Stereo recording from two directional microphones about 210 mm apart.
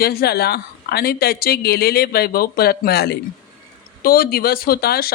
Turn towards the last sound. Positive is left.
turn(degrees=45)  # may be behind; listen again after turning